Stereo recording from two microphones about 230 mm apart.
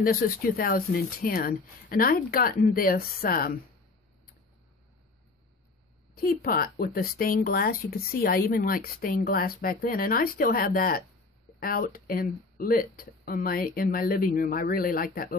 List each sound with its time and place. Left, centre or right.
0.0 s speech: left
6.1 s speech: left